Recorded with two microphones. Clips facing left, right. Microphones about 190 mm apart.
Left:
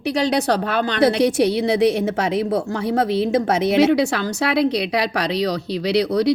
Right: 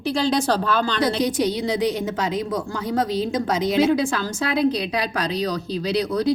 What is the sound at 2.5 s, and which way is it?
A woman's voice, 30° left (ahead or behind).